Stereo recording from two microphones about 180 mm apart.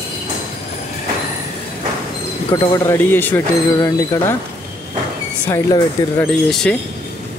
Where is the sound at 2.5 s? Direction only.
20° left (ahead or behind).